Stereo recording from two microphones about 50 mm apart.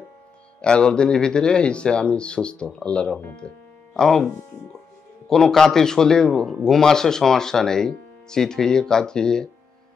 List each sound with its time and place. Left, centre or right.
0.6 s speech: centre
3.3 s music: centre
5.3 s speech: centre